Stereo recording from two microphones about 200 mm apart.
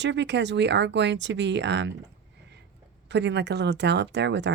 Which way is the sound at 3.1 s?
60° right (ahead or behind).